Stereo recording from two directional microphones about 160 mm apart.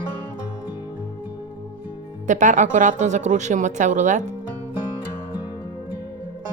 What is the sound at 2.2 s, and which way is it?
Speech, 50° right (ahead or behind).